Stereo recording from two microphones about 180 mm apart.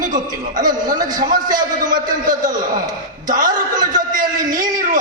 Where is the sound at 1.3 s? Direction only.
20° right (ahead or behind).